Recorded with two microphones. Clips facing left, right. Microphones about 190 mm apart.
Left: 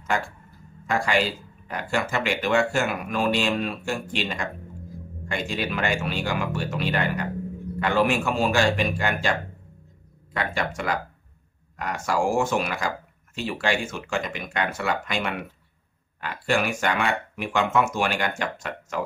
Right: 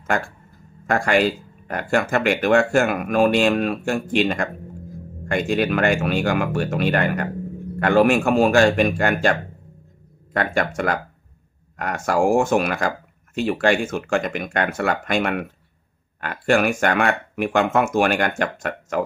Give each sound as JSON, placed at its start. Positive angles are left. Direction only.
{"t": 0.8, "sound": "speech", "side_deg": -50}